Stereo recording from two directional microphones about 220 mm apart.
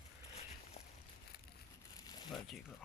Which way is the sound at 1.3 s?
45° left (ahead or behind).